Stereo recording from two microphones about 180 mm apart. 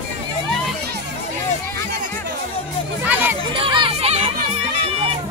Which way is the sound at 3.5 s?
30° right (ahead or behind).